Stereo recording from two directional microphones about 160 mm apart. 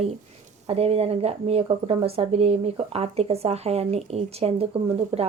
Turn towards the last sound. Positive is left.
turn(degrees=-35)  # may be behind; listen again after turning